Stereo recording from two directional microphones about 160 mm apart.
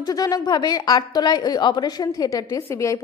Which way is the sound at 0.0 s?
25° left (ahead or behind).